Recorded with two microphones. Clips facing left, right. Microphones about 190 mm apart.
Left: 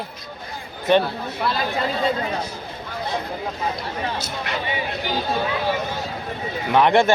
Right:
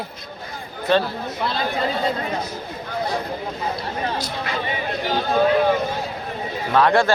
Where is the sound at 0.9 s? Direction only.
15° left (ahead or behind).